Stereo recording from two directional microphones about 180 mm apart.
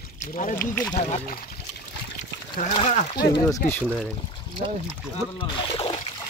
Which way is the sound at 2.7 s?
35° left (ahead or behind).